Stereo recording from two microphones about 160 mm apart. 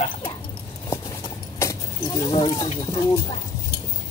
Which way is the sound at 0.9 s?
20° left (ahead or behind).